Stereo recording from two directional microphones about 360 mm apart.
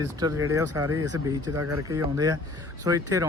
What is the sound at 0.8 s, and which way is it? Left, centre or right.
Speech, right.